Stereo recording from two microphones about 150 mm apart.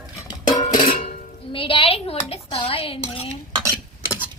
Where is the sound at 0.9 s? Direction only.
60° left (ahead or behind).